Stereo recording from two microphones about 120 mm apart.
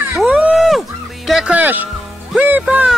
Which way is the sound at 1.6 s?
15° right (ahead or behind).